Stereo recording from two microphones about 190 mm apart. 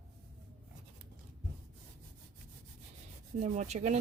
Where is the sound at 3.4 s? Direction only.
35° right (ahead or behind).